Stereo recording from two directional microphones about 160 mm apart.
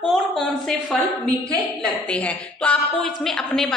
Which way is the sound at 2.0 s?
10° left (ahead or behind).